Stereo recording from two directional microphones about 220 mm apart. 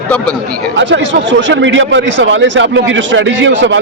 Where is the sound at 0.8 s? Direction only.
55° right (ahead or behind).